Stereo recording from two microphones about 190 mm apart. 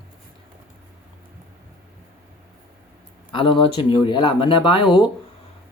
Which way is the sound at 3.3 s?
25° left (ahead or behind).